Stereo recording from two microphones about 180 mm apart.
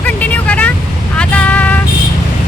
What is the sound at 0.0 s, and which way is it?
Vehicle, 10° left (ahead or behind).